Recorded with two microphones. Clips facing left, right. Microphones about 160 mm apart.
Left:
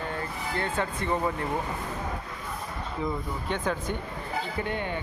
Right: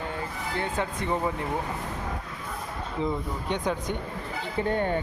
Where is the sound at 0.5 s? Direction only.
15° right (ahead or behind).